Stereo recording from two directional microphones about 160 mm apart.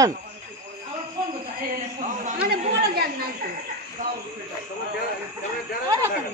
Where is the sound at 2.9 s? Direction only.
70° right (ahead or behind).